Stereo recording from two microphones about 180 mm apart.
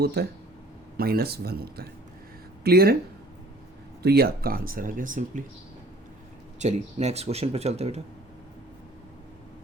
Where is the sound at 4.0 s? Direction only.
60° right (ahead or behind).